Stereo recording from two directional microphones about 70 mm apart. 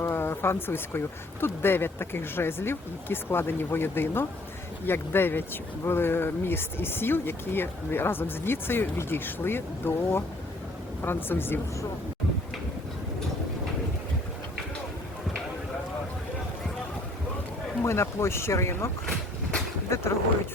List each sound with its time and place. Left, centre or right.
0.0 s speech: left
17.8 s speech: left
19.9 s speech: left